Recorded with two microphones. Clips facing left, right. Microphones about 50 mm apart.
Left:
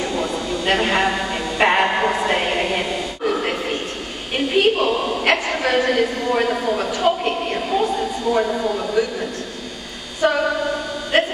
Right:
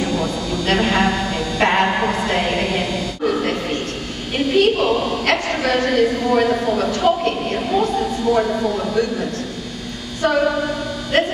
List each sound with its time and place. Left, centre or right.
0.0 s a man's voice: left
1.6 s a man's voice: centre
2.2 s a woman's voice: centre
4.6 s a man's voice: centre
10.2 s a man's voice: centre
11.1 s music: centre